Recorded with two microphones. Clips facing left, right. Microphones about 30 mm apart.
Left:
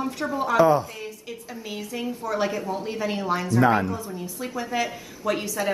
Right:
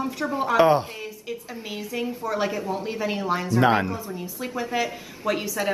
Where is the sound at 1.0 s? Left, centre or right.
Centre.